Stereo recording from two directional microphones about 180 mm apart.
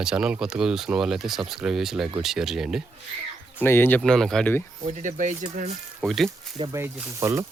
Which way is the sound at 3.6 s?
10° left (ahead or behind).